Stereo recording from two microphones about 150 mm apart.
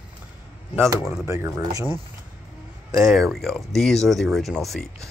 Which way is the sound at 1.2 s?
20° right (ahead or behind).